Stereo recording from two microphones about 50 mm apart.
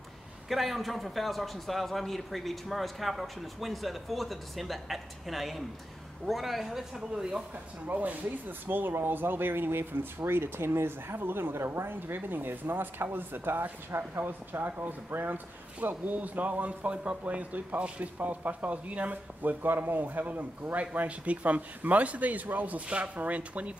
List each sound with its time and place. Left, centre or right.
0.5 s a man's voice: centre
7.9 s speech: right